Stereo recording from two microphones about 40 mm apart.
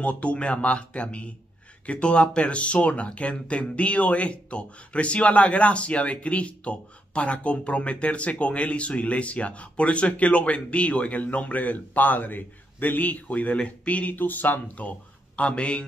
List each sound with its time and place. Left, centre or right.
0.0 s speech: left
14.1 s speech: left